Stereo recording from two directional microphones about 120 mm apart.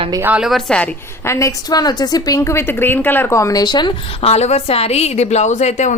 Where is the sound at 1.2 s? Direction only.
25° left (ahead or behind).